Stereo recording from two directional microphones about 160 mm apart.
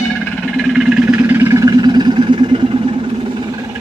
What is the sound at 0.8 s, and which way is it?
Music, 10° right (ahead or behind).